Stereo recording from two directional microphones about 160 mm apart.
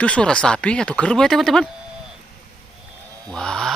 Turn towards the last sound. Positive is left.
turn(degrees=5)  # may be behind; listen again after turning